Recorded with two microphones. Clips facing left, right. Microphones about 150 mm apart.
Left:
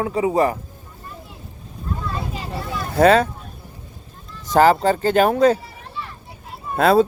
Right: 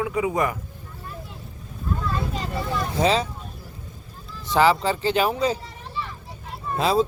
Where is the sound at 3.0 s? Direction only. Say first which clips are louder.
Left 8 dB; 55° left (ahead or behind).